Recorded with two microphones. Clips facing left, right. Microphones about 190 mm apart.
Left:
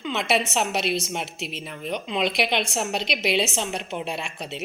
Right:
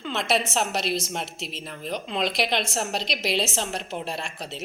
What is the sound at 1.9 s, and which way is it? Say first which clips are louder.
A woman's voice: left 2 dB; centre (ahead or behind).